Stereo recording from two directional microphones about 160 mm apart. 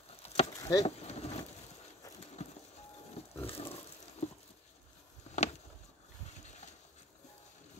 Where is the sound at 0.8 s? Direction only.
40° left (ahead or behind).